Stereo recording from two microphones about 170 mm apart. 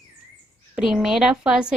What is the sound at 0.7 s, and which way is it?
Speech, 5° right (ahead or behind).